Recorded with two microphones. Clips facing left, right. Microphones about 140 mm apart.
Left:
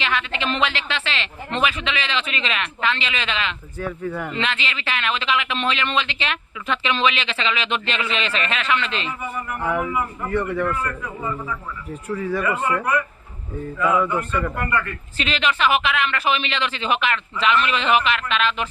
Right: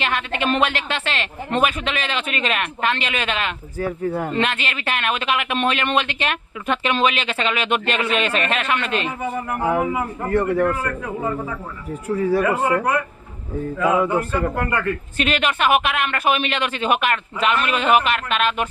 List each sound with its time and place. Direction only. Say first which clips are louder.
0.0 s speech: right 2 dB; 50° right (ahead or behind)
9.5 s a man's voice: right 3 dB; 40° right (ahead or behind)
9.9 s a man's voice: right 1 dB; 25° right (ahead or behind)
10.2 s a man's voice: right 6 dB; 40° right (ahead or behind)
11.0 s a man's voice: right 4 dB; 60° right (ahead or behind)
12.1 s a man's voice: right 5 dB; 35° right (ahead or behind)
13.8 s a man's voice: right 2 dB; 30° right (ahead or behind)
15.2 s speech: right 1 dB; 50° right (ahead or behind)